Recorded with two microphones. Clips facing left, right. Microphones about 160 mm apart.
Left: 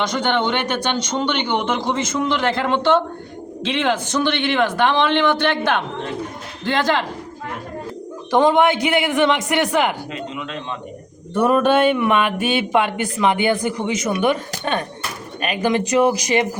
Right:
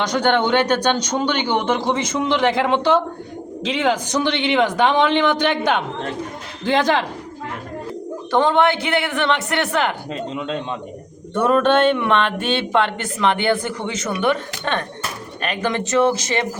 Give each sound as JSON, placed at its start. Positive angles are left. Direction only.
{"t": 0.0, "sound": "a man's voice", "side_deg": -10}
{"t": 8.3, "sound": "speech", "side_deg": 15}
{"t": 10.1, "sound": "speech", "side_deg": -30}
{"t": 11.3, "sound": "speech", "side_deg": 10}